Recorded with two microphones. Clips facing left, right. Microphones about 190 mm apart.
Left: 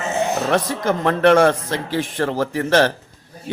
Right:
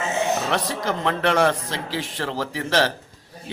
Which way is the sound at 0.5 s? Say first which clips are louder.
Left 5 dB; 50° left (ahead or behind).